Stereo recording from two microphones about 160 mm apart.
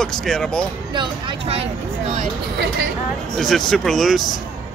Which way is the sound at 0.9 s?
30° right (ahead or behind).